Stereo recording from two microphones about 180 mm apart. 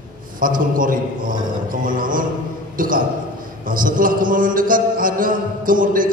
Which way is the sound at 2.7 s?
50° right (ahead or behind).